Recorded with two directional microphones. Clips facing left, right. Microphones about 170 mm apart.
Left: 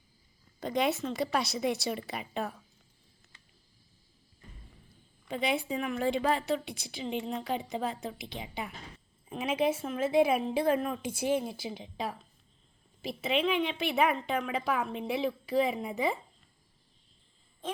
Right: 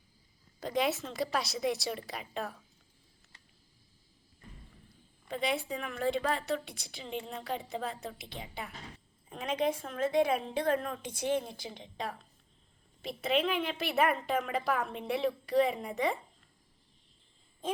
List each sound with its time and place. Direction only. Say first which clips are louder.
0.6 s a woman's voice: left 2 dB; centre (ahead or behind)
5.3 s a woman's voice: left 2 dB; centre (ahead or behind)
7.3 s speech: left 6 dB; 20° left (ahead or behind)
7.9 s a woman's voice: left 4 dB; centre (ahead or behind)